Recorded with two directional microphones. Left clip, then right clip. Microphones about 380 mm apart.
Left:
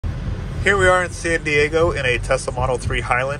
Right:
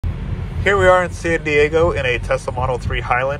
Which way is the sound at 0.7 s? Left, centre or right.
Centre.